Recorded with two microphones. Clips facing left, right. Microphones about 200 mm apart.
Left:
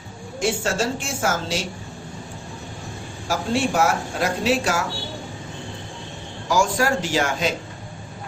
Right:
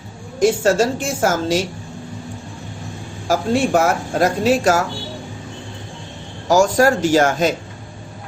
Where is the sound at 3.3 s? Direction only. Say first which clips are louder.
Right 5 dB; 50° right (ahead or behind).